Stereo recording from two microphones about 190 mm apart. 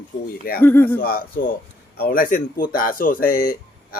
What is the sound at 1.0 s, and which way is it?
Speech, 50° left (ahead or behind).